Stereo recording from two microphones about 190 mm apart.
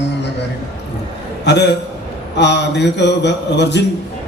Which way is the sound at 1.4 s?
65° left (ahead or behind).